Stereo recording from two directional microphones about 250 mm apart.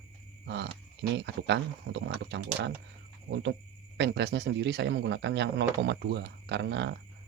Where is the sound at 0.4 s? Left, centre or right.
Right.